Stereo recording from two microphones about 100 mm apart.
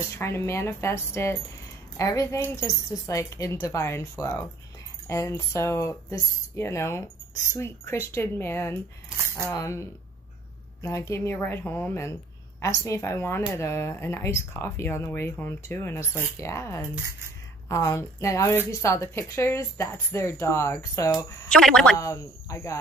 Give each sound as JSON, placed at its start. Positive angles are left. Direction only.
{"t": 0.1, "sound": "speech", "side_deg": 30}
{"t": 21.5, "sound": "a woman's voice", "side_deg": 5}
{"t": 21.9, "sound": "speech", "side_deg": 30}